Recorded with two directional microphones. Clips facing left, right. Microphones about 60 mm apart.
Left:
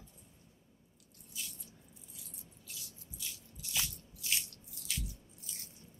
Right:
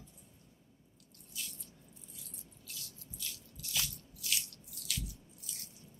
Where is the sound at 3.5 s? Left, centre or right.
Left.